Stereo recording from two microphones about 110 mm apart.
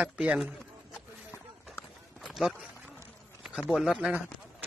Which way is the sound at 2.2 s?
Centre (ahead or behind).